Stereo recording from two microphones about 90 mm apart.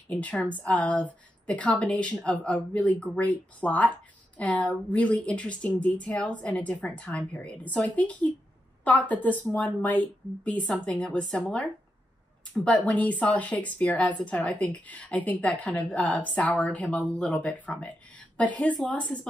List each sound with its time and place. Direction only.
0.1 s speech: 15° left (ahead or behind)